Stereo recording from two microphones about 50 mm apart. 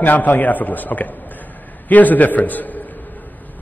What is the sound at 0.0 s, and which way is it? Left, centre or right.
A man's voice, left.